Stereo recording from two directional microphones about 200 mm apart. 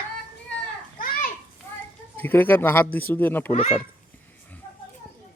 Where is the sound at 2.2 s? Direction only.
10° left (ahead or behind).